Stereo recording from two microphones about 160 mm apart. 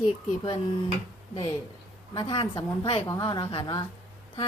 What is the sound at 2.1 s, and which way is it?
A woman's voice, 30° left (ahead or behind).